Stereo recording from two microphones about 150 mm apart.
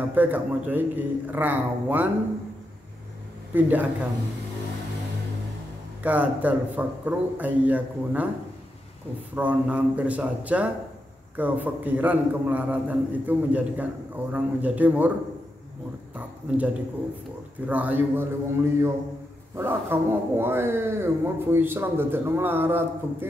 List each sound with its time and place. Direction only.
0.1 s a man's voice: 10° right (ahead or behind)
3.5 s a man's voice: 10° right (ahead or behind)
6.0 s a man's voice: 10° right (ahead or behind)
9.3 s a man's voice: 10° right (ahead or behind)
16.2 s a man's voice: 10° right (ahead or behind)